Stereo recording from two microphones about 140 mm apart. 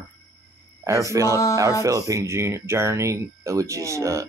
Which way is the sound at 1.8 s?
25° right (ahead or behind).